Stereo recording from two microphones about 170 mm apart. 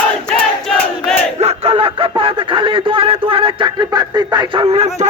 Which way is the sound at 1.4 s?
35° right (ahead or behind).